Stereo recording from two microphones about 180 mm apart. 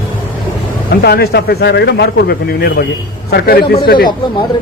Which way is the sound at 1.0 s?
60° left (ahead or behind).